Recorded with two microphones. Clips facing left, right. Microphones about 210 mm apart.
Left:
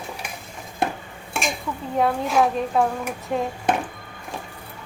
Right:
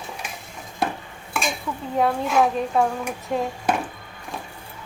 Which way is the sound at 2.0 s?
Centre (ahead or behind).